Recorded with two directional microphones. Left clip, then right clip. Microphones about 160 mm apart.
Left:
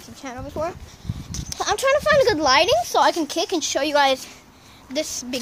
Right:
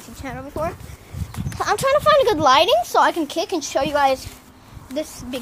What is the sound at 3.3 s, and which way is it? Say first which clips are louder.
Speech: even; 35° left (ahead or behind).